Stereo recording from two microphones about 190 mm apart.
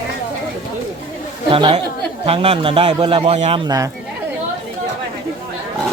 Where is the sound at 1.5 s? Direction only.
30° right (ahead or behind).